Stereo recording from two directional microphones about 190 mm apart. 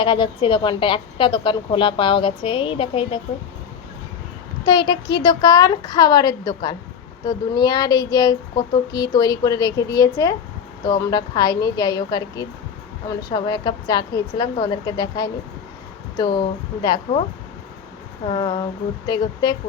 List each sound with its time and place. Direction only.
0.0 s a woman's voice: 25° left (ahead or behind)
4.6 s a woman's voice: 25° left (ahead or behind)
18.3 s a woman's voice: 25° left (ahead or behind)